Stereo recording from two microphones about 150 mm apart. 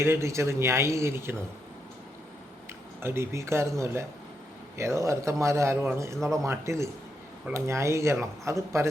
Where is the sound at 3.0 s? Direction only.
15° right (ahead or behind).